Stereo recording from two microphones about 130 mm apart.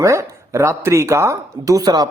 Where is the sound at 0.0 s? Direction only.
20° right (ahead or behind).